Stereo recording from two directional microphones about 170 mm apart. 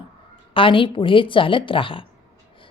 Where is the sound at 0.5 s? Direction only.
30° left (ahead or behind).